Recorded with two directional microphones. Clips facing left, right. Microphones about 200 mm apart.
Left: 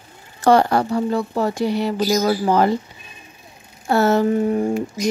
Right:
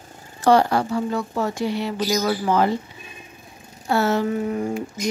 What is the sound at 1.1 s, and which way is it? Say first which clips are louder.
Speech: left 4 dB; 35° left (ahead or behind).